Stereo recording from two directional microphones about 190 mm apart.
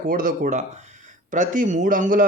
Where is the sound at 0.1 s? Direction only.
45° right (ahead or behind).